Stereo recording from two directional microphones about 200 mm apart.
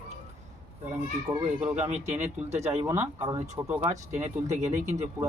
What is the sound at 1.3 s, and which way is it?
Speech, 5° right (ahead or behind).